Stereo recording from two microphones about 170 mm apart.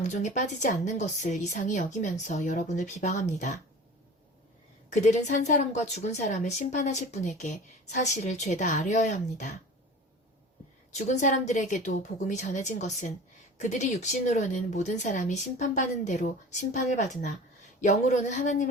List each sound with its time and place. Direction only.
0.1 s a woman's voice: 45° left (ahead or behind)
4.9 s a woman's voice: 45° left (ahead or behind)
10.9 s a woman's voice: 45° left (ahead or behind)